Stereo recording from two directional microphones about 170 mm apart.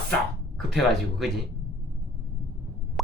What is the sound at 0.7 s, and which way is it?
Speech, centre (ahead or behind).